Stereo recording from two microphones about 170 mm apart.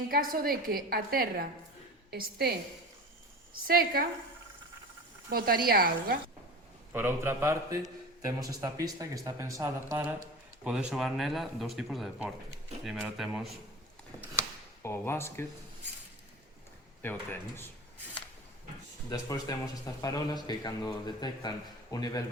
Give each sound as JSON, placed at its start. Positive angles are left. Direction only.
{"t": 0.1, "sound": "a woman's voice", "side_deg": -60}
{"t": 3.7, "sound": "a woman's voice", "side_deg": -60}
{"t": 5.3, "sound": "a woman's voice", "side_deg": -60}
{"t": 6.9, "sound": "a man's voice", "side_deg": -15}
{"t": 10.6, "sound": "speech", "side_deg": -5}
{"t": 14.8, "sound": "speech", "side_deg": 15}
{"t": 17.0, "sound": "speech", "side_deg": 10}
{"t": 19.1, "sound": "a man's voice", "side_deg": 20}